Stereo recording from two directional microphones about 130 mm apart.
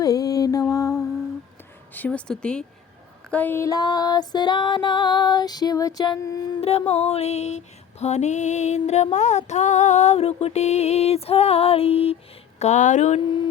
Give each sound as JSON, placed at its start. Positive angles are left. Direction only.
{"t": 0.0, "sound": "mantra", "side_deg": 30}
{"t": 1.9, "sound": "speech", "side_deg": 10}
{"t": 3.2, "sound": "music", "side_deg": 10}
{"t": 6.6, "sound": "female singing", "side_deg": 55}
{"t": 12.5, "sound": "female singing", "side_deg": 65}